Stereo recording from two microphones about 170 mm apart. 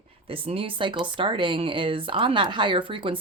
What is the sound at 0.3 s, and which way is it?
Speech, 35° right (ahead or behind).